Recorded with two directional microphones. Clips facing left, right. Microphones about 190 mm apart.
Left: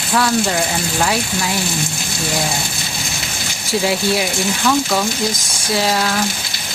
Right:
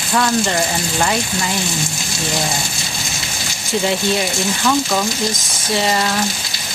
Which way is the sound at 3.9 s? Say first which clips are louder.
Even; 5° left (ahead or behind).